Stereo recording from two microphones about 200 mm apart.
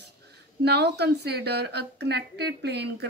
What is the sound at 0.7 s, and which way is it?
A woman's voice, 60° right (ahead or behind).